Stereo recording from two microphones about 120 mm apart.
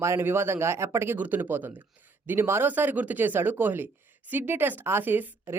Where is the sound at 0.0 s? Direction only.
20° right (ahead or behind).